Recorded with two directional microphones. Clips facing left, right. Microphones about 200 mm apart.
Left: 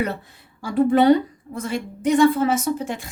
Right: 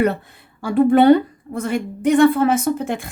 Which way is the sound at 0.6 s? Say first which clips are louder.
Right 3 dB; 60° right (ahead or behind).